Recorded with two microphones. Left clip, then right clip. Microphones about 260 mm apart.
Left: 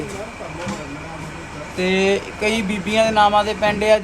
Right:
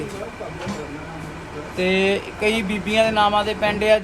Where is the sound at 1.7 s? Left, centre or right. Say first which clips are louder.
Left 1 dB; centre.